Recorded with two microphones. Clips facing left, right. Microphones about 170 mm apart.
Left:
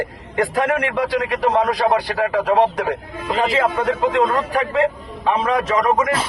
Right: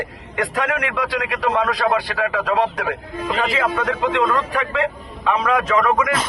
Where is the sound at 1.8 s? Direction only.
45° left (ahead or behind).